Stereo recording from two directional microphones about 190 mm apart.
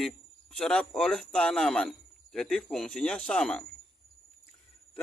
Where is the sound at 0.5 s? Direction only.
5° left (ahead or behind).